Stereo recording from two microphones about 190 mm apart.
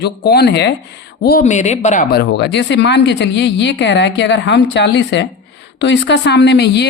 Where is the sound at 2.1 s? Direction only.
60° left (ahead or behind).